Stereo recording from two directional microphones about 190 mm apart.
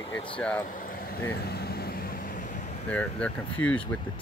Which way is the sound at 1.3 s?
55° left (ahead or behind).